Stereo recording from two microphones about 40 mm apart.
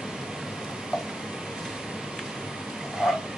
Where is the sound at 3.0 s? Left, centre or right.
Centre.